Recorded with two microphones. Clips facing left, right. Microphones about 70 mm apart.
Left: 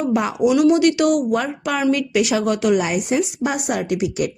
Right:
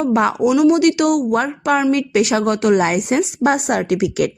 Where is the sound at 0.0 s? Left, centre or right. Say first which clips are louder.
Right 4 dB; right.